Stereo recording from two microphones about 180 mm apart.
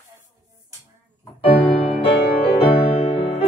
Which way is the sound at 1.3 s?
35° left (ahead or behind).